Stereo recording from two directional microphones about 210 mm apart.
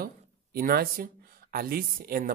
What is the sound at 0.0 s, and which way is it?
Speech, 45° right (ahead or behind).